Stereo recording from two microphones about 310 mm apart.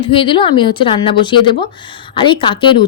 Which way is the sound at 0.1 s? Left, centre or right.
Centre.